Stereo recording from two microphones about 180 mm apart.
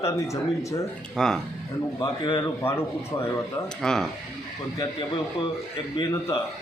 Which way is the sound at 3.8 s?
5° left (ahead or behind).